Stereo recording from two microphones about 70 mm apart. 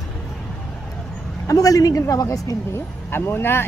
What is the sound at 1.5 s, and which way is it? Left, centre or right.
A woman's voice, left.